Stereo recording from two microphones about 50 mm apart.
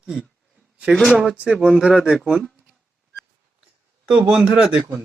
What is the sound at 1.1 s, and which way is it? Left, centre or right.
Speech, centre.